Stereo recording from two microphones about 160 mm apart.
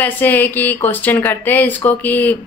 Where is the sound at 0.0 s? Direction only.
10° left (ahead or behind).